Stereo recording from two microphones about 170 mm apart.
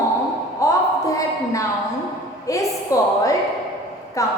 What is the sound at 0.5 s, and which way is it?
A woman's voice, 20° left (ahead or behind).